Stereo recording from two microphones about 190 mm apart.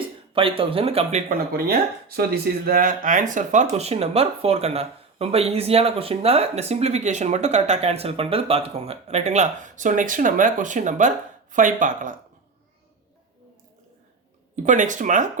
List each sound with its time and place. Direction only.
0.3 s a man's voice: 30° right (ahead or behind)
1.3 s speech: 50° right (ahead or behind)
14.5 s speech: 40° right (ahead or behind)